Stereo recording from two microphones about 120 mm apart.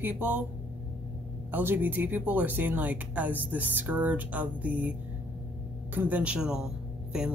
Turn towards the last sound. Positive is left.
turn(degrees=-5)  # may be behind; listen again after turning